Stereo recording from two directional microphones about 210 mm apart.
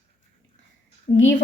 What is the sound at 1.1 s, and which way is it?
Speech, 15° left (ahead or behind).